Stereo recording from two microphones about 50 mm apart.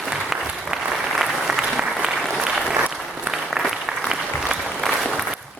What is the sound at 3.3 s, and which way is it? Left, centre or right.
Applause, right.